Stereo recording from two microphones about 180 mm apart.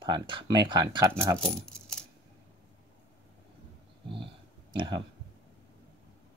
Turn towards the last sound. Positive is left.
turn(degrees=-25)  # may be behind; listen again after turning